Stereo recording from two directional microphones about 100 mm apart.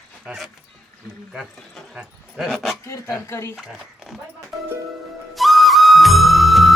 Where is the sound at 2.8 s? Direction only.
30° left (ahead or behind).